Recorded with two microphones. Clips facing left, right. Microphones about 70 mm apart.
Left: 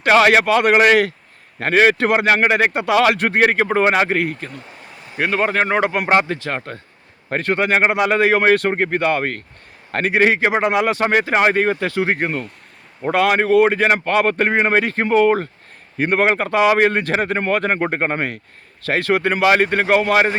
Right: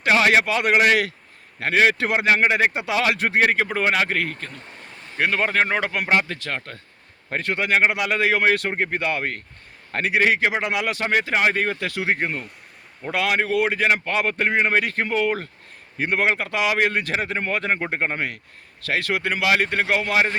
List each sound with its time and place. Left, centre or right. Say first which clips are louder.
0.0 s speech: left 5 dB; left
4.2 s speech: left 5 dB; centre
5.6 s a man's voice: left 5 dB; left
7.3 s a man's voice: left 5 dB; left
8.7 s speech: left 6 dB; left
10.1 s a man's voice: left 4 dB; left
12.0 s speech: left 3 dB; left
13.0 s speech: left 6 dB; left
14.8 s a man's voice: left 7 dB; left
16.0 s speech: left 5 dB; left
18.8 s speech: left 6 dB; left